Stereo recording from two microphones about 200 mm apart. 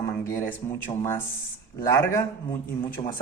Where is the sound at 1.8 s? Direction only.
15° left (ahead or behind).